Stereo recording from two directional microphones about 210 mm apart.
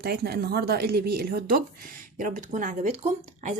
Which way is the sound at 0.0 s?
50° right (ahead or behind).